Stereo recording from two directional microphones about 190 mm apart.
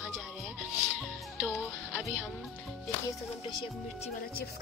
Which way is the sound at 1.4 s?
5° right (ahead or behind).